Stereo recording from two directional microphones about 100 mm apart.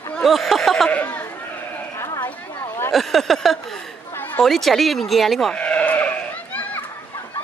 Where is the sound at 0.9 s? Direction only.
15° left (ahead or behind).